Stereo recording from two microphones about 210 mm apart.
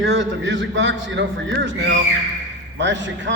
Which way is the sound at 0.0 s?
60° right (ahead or behind).